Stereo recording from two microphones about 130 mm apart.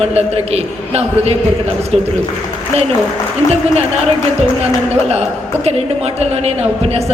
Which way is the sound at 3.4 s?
30° left (ahead or behind).